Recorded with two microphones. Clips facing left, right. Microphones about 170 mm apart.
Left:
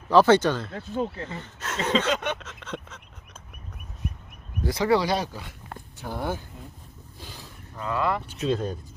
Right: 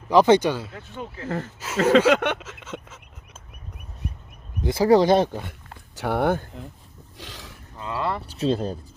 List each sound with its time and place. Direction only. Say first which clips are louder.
0.1 s speech: right 1 dB; 15° right (ahead or behind)
0.8 s speech: left 6 dB; 35° left (ahead or behind)
1.5 s speech: right 7 dB; 5° right (ahead or behind)
2.0 s a sound: right 7 dB; 60° right (ahead or behind)
2.4 s a sound: even; 5° right (ahead or behind)
4.6 s speech: right 4 dB; 25° right (ahead or behind)
4.9 s speech: right 8 dB; 45° right (ahead or behind)
6.0 s speech: right 9 dB; 70° right (ahead or behind)
7.2 s a sound: right 3 dB; 90° right
7.8 s speech: left 1 dB; 25° right (ahead or behind)